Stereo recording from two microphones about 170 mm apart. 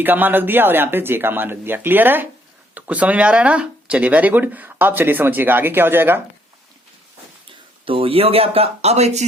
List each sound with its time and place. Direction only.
0.0 s speech: 10° right (ahead or behind)
7.9 s speech: 35° right (ahead or behind)